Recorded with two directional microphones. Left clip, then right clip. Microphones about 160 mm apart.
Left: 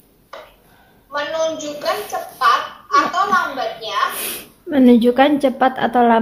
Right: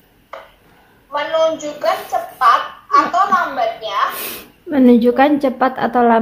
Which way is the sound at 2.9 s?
25° right (ahead or behind).